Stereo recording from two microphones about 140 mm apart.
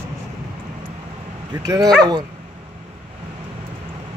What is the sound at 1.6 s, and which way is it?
Speech, 25° right (ahead or behind).